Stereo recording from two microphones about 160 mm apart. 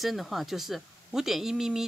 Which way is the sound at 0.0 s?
Centre (ahead or behind).